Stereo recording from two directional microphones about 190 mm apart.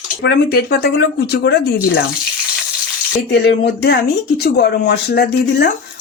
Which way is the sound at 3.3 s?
60° left (ahead or behind).